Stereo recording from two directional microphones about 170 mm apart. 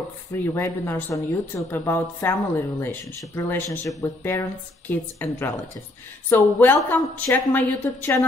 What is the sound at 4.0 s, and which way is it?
A woman's voice, 20° left (ahead or behind).